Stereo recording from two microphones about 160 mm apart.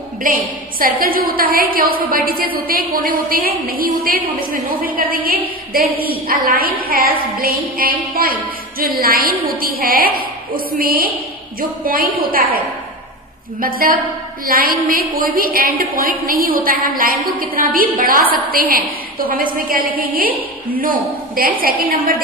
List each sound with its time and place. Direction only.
0.2 s a woman's voice: 55° right (ahead or behind)
5.7 s a woman's voice: 70° right (ahead or behind)